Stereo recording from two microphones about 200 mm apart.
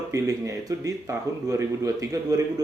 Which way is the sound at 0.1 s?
15° right (ahead or behind).